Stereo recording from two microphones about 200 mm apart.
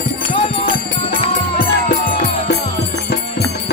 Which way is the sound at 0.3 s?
25° left (ahead or behind).